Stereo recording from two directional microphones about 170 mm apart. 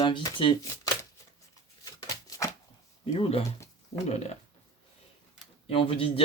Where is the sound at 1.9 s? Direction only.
25° left (ahead or behind).